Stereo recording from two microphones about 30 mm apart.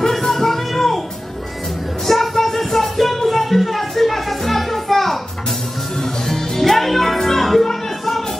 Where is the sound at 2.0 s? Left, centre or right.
Centre.